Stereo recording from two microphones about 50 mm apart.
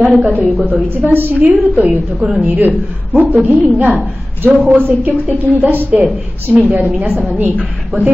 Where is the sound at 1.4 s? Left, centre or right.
Right.